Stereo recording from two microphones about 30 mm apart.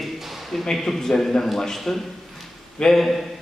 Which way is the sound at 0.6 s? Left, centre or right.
Centre.